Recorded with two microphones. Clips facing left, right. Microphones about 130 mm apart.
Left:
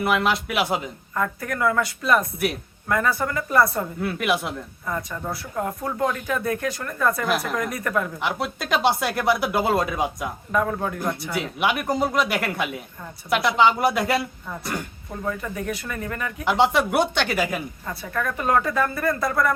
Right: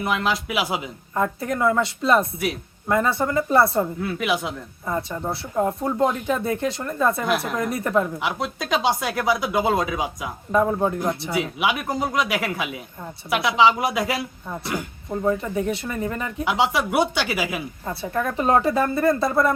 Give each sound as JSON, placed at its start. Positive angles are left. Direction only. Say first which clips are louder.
{"t": 0.0, "sound": "speech", "louder": "left 2 dB", "side_deg": 5}
{"t": 1.1, "sound": "speech", "louder": "right 3 dB", "side_deg": -25}
{"t": 4.0, "sound": "speech", "louder": "even", "side_deg": 0}
{"t": 4.9, "sound": "speech", "louder": "right 3 dB", "side_deg": -30}
{"t": 8.2, "sound": "speech", "louder": "even", "side_deg": 0}
{"t": 10.5, "sound": "speech", "louder": "right 4 dB", "side_deg": -25}
{"t": 11.6, "sound": "speech", "louder": "left 4 dB", "side_deg": 0}
{"t": 15.2, "sound": "speech", "louder": "right 6 dB", "side_deg": -25}
{"t": 16.4, "sound": "speech", "louder": "left 2 dB", "side_deg": 0}
{"t": 17.8, "sound": "speech", "louder": "right 5 dB", "side_deg": -25}